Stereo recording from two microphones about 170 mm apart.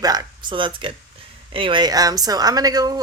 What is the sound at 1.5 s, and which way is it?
Speech, 30° right (ahead or behind).